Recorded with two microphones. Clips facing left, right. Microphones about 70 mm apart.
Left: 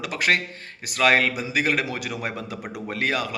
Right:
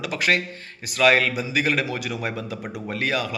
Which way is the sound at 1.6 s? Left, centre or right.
Left.